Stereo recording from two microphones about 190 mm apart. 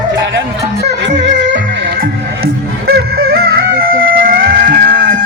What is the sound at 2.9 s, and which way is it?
Music, 55° right (ahead or behind).